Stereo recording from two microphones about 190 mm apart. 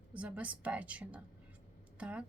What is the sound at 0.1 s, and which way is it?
A woman's voice, 10° right (ahead or behind).